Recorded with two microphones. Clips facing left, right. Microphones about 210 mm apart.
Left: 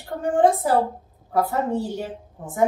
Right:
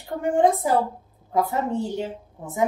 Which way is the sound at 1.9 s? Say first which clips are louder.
Right 1 dB; 20° right (ahead or behind).